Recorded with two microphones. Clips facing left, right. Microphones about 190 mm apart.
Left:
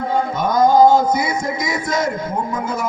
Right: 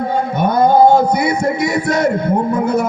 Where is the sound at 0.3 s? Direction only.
60° right (ahead or behind).